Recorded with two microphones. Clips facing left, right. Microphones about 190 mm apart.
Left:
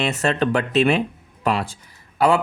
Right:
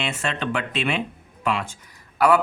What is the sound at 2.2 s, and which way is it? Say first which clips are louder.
Speech: left 1 dB; 25° left (ahead or behind).